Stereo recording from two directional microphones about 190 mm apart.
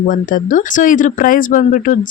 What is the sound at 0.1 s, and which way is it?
Speech, 45° left (ahead or behind).